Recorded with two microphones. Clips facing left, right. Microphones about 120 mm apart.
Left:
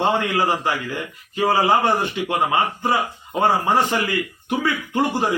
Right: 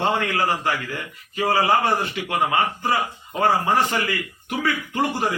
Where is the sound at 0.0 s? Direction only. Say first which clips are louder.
Left 2 dB; 20° left (ahead or behind).